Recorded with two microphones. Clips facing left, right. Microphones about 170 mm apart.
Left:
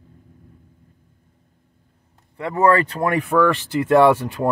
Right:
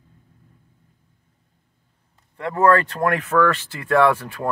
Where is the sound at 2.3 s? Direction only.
10° left (ahead or behind).